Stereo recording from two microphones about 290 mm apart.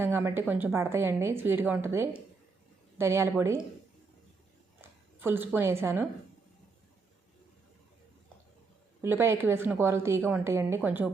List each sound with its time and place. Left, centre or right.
0.0 s a woman's voice: centre
4.8 s speech: centre
9.0 s a woman's voice: centre